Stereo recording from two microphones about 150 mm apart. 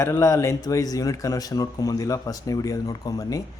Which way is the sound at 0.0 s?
20° left (ahead or behind).